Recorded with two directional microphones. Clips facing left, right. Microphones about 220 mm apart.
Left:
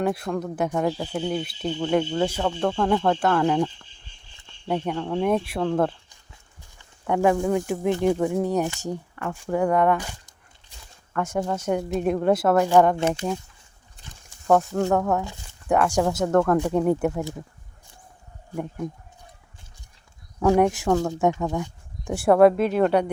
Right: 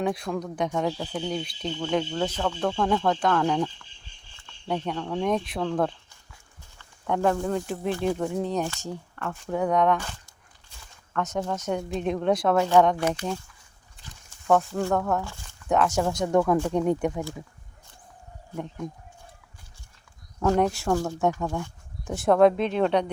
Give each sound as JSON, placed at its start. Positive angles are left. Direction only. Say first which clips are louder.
{"t": 0.0, "sound": "speech", "louder": "left 2 dB", "side_deg": 5}
{"t": 4.7, "sound": "speech", "louder": "left 3 dB", "side_deg": 10}
{"t": 13.0, "sound": "speech", "louder": "left 2 dB", "side_deg": 25}
{"t": 14.4, "sound": "speech", "louder": "left 3 dB", "side_deg": 10}
{"t": 16.2, "sound": "speech", "louder": "left 1 dB", "side_deg": 0}
{"t": 20.4, "sound": "speech", "louder": "left 4 dB", "side_deg": 15}